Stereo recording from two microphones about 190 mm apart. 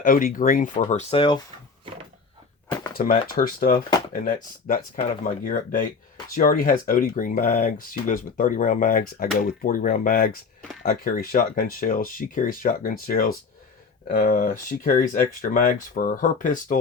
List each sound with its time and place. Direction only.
0.0 s speech: 50° left (ahead or behind); by 1.4 s 25° left (ahead or behind)
2.9 s speech: 50° left (ahead or behind)